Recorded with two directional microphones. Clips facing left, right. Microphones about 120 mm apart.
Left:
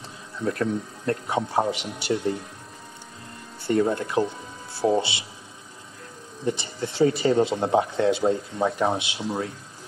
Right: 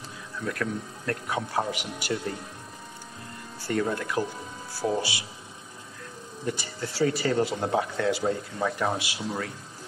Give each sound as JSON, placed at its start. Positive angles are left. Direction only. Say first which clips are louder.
{"t": 0.4, "sound": "speech", "louder": "left 5 dB", "side_deg": 25}
{"t": 3.6, "sound": "speech", "louder": "left 5 dB", "side_deg": 25}
{"t": 6.4, "sound": "speech", "louder": "left 5 dB", "side_deg": 25}